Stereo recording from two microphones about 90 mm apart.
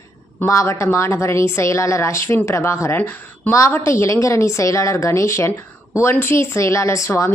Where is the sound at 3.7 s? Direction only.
30° left (ahead or behind).